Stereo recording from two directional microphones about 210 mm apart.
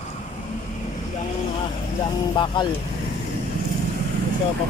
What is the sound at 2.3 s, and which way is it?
Speech, 20° left (ahead or behind).